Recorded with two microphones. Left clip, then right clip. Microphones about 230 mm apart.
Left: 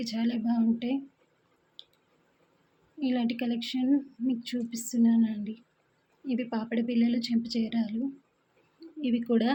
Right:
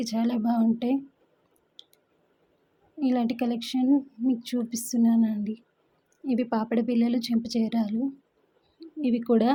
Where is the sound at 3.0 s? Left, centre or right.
Right.